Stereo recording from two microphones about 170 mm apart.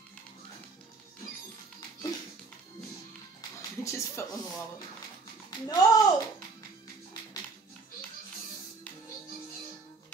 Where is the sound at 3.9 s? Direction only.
15° left (ahead or behind).